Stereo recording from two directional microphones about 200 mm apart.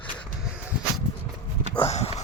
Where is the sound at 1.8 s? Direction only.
30° left (ahead or behind).